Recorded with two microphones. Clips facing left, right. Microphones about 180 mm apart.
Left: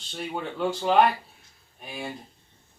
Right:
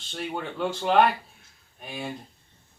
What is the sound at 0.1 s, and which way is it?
Speech, centre (ahead or behind).